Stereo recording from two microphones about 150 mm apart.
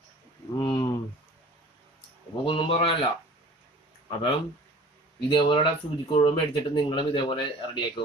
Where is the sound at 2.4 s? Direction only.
35° left (ahead or behind).